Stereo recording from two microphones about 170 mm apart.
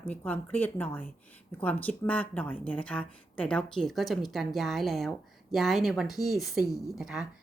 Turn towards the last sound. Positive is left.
turn(degrees=0)  # may be behind; listen again after turning